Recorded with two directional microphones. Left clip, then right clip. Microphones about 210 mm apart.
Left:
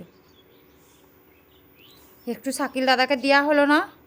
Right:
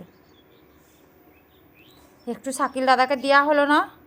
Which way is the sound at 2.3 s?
15° left (ahead or behind).